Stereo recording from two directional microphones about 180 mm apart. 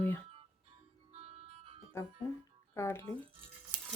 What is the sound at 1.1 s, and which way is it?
Music, 35° right (ahead or behind).